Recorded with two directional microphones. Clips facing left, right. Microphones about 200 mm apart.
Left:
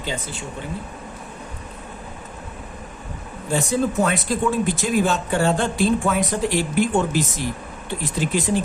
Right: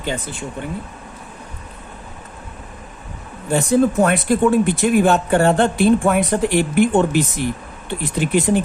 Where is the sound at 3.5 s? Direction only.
60° right (ahead or behind).